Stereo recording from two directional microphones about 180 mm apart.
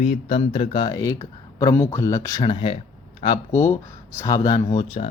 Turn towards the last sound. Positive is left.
turn(degrees=30)  # may be behind; listen again after turning